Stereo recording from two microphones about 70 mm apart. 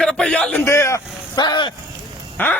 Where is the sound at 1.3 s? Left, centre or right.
Left.